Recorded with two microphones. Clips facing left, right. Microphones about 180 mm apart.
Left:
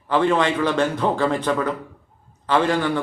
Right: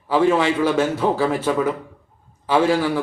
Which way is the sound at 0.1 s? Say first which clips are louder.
Right 2 dB; 10° right (ahead or behind).